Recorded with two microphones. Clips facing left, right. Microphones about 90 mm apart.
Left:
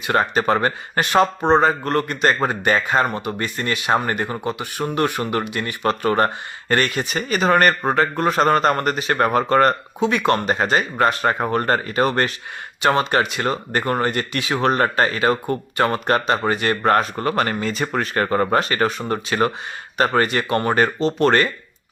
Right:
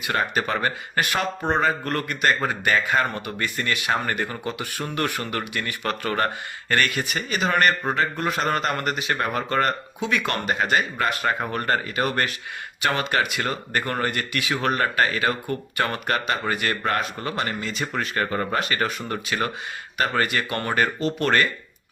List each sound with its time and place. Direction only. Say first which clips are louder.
0.0 s speech: left 5 dB; 35° left (ahead or behind)
7.3 s speech: left 5 dB; 40° left (ahead or behind)
10.1 s speech: left 5 dB; 25° left (ahead or behind)